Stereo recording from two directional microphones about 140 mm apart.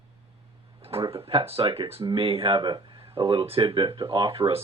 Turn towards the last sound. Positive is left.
turn(degrees=-40)  # may be behind; listen again after turning